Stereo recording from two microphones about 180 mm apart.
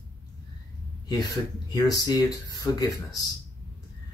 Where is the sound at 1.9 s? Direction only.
20° left (ahead or behind).